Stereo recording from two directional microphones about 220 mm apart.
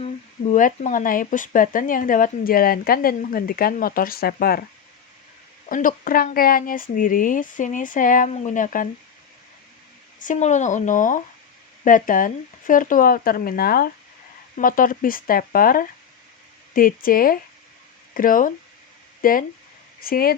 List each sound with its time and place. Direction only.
0.5 s speech: 35° left (ahead or behind)
5.6 s speech: 40° left (ahead or behind)
10.2 s speech: 35° left (ahead or behind)